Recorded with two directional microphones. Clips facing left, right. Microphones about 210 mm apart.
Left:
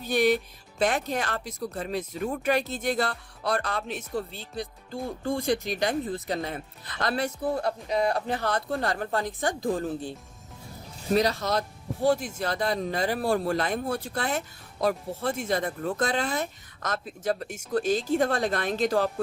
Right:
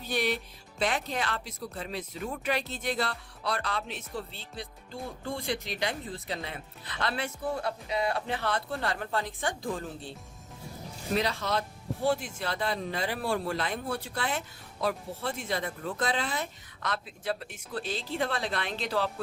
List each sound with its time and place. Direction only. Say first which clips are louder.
0.0 s music: left 7 dB; 45° left (ahead or behind)
0.8 s speech: left 4 dB; 45° left (ahead or behind)
11.1 s speech: left 5 dB; 40° left (ahead or behind)